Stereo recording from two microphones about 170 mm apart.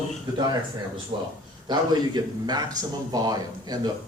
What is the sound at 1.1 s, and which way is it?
A man's voice, 30° right (ahead or behind).